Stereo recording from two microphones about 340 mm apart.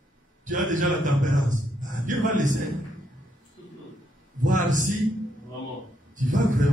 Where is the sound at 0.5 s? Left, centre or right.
Right.